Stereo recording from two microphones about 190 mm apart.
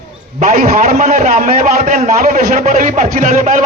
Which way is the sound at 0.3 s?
40° right (ahead or behind).